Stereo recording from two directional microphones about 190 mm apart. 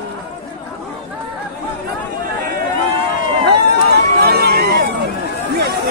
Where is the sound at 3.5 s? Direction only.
60° right (ahead or behind).